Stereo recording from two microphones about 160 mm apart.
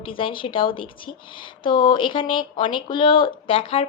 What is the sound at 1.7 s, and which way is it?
A woman's voice, 30° left (ahead or behind).